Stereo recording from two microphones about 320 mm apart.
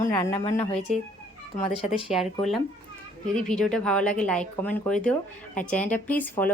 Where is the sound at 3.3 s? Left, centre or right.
Centre.